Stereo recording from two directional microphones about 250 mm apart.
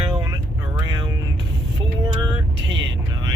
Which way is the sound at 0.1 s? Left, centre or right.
Centre.